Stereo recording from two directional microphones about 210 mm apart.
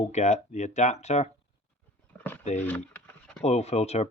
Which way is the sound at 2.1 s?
5° left (ahead or behind).